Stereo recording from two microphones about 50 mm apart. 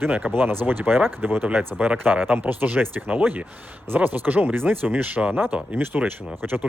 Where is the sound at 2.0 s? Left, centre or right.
Right.